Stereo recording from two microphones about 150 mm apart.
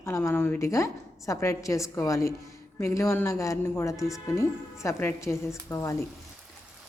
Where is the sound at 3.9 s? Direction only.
Centre (ahead or behind).